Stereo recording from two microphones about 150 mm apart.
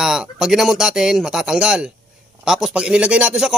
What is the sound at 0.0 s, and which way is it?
Speech, 5° right (ahead or behind).